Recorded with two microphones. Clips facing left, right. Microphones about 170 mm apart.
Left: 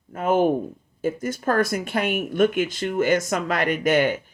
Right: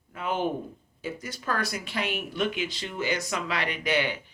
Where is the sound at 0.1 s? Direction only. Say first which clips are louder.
Left 9 dB; 45° left (ahead or behind).